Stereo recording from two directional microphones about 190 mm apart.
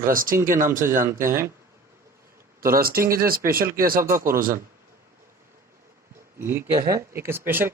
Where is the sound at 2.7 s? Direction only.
50° right (ahead or behind).